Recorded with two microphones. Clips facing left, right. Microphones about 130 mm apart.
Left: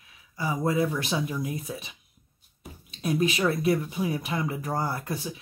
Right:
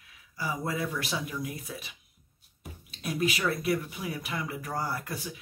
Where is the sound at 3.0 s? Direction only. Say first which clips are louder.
Left 5 dB; 25° left (ahead or behind).